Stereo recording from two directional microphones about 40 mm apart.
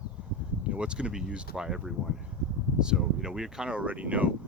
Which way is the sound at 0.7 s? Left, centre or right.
Right.